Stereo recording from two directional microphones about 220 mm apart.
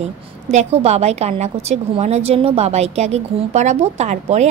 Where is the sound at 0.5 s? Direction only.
30° right (ahead or behind).